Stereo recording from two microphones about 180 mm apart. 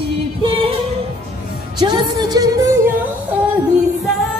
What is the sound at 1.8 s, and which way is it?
Speech, 25° right (ahead or behind).